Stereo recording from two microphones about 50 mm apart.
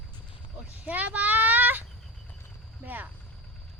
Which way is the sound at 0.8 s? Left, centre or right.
Right.